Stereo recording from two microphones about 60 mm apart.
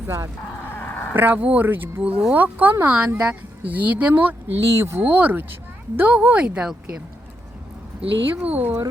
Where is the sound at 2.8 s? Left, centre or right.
Centre.